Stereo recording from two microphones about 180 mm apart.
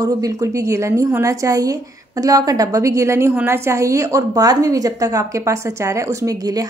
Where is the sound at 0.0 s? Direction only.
20° right (ahead or behind).